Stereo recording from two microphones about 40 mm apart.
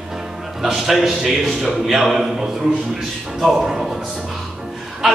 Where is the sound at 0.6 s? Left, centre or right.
Centre.